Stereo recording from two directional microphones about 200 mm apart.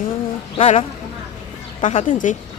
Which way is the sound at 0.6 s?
30° left (ahead or behind).